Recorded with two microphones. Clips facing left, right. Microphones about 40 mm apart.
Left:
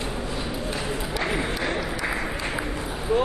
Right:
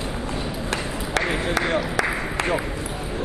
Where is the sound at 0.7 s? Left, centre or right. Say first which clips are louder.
Right 1 dB; right.